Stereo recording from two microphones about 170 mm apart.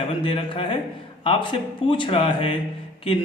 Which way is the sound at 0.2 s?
30° left (ahead or behind).